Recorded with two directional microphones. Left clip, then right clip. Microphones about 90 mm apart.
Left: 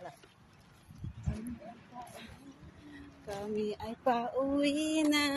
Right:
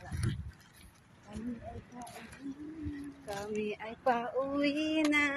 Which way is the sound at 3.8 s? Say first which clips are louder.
Right 1 dB; 35° left (ahead or behind).